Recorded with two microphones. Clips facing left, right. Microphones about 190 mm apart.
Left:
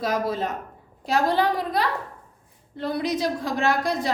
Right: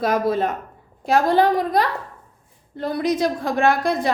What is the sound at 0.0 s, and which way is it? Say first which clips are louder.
A woman's voice: right 5 dB; 60° right (ahead or behind).